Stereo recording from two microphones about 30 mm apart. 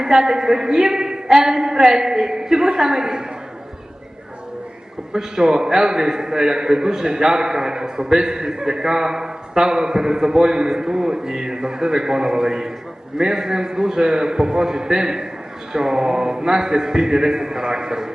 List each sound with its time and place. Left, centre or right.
0.0 s a man's voice: right
5.1 s a man's voice: right